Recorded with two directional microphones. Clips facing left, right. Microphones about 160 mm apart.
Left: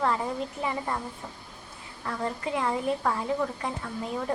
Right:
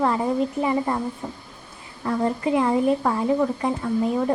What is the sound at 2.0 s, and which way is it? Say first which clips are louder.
A woman's voice: right 9 dB; 20° right (ahead or behind).